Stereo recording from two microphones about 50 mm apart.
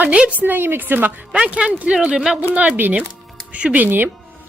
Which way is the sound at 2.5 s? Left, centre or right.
Right.